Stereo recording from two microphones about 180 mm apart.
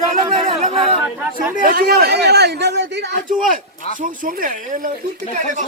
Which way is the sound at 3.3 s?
45° right (ahead or behind).